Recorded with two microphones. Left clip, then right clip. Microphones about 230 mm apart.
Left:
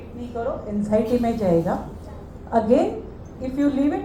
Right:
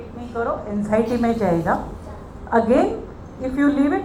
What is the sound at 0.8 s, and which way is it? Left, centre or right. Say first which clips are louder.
A woman's voice: even; right.